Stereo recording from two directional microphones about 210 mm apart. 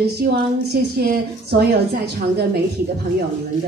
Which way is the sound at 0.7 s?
45° right (ahead or behind).